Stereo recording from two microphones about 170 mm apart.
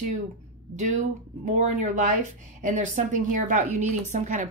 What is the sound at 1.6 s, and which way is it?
A woman's voice, 45° right (ahead or behind).